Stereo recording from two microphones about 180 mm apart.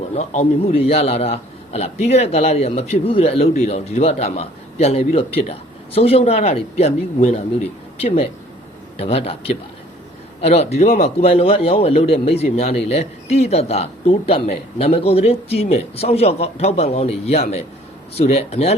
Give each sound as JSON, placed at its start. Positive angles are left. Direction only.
{"t": 0.1, "sound": "a man's voice", "side_deg": 35}